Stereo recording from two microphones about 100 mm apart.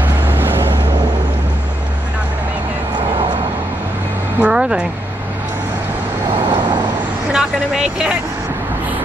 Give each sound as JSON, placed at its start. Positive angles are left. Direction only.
{"t": 0.0, "sound": "vehicle", "side_deg": -20}
{"t": 4.4, "sound": "a sound", "side_deg": -10}
{"t": 6.3, "sound": "vehicle", "side_deg": -55}
{"t": 7.3, "sound": "speech", "side_deg": -5}